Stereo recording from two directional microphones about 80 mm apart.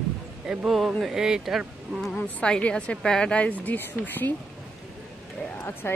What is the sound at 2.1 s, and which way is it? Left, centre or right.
A woman's voice, centre.